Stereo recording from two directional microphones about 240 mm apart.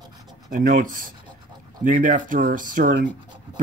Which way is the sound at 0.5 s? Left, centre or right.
Right.